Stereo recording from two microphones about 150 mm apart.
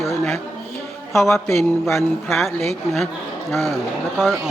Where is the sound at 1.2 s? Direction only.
20° left (ahead or behind).